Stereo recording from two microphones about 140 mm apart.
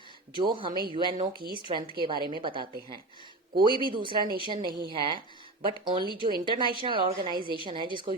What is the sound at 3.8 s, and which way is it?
A woman's voice, 35° right (ahead or behind).